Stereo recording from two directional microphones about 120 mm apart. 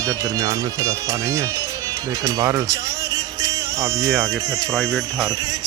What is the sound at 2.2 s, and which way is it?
Music, 30° right (ahead or behind).